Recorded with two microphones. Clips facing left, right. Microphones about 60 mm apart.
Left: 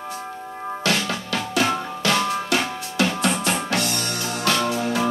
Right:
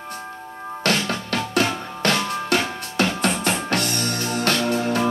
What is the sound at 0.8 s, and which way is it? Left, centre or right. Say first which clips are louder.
Music: right 2 dB; right.